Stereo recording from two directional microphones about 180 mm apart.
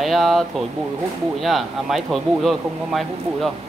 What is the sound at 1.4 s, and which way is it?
Speech, centre (ahead or behind).